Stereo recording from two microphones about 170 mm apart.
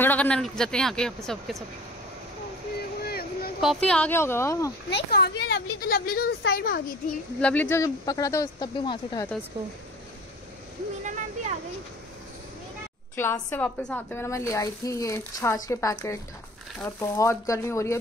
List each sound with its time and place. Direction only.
0.0 s speech: 10° left (ahead or behind)
3.0 s a sound: 65° left (ahead or behind)
3.6 s speech: 5° left (ahead or behind)
4.8 s speech: 80° left; by 7.0 s 60° left (ahead or behind)
7.3 s speech: 10° left (ahead or behind); by 9.3 s 25° left (ahead or behind)
13.1 s speech: 15° left (ahead or behind)